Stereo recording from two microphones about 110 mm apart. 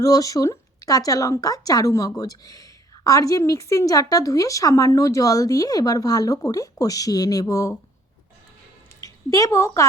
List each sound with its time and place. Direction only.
0.0 s speech: 30° left (ahead or behind)
9.0 s a woman's voice: 30° left (ahead or behind)